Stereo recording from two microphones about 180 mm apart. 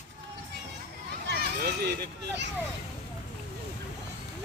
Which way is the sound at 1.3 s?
60° right (ahead or behind).